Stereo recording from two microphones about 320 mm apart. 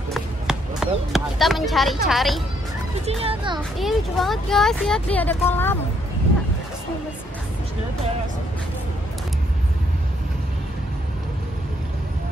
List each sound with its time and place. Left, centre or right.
0.1 s a sound: centre
2.0 s speech: centre
3.1 s a child's voice: centre
3.7 s speech: centre